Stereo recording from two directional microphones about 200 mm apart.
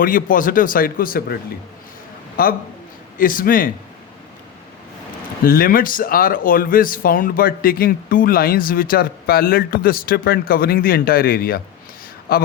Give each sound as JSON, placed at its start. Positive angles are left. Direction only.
{"t": 0.0, "sound": "a man's voice", "side_deg": 45}
{"t": 5.5, "sound": "speech", "side_deg": 45}